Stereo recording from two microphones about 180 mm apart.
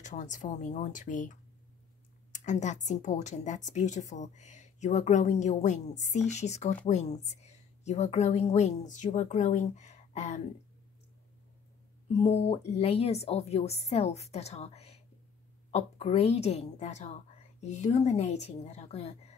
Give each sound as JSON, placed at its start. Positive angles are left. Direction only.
{"t": 0.0, "sound": "a woman's voice", "side_deg": 45}
{"t": 12.2, "sound": "a woman's voice", "side_deg": 35}